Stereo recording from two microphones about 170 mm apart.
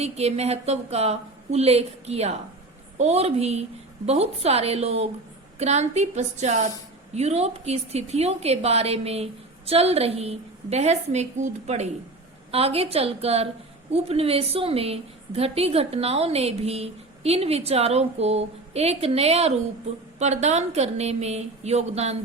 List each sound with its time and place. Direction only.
0.0 s a woman's voice: 40° right (ahead or behind)